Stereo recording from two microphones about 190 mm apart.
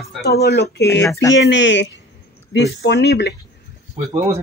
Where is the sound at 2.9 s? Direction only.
60° left (ahead or behind).